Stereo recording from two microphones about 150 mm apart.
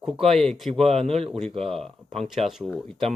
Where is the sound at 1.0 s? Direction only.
40° right (ahead or behind).